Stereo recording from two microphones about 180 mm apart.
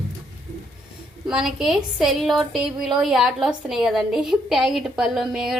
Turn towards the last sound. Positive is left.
turn(degrees=-5)  # may be behind; listen again after turning